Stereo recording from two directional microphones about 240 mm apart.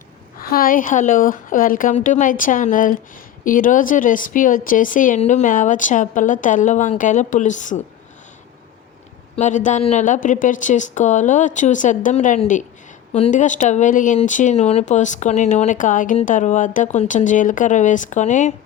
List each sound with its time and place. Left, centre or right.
0.3 s speech: left
9.3 s speech: left